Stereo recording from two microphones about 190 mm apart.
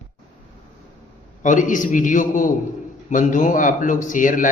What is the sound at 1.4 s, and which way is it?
A man's voice, 40° left (ahead or behind).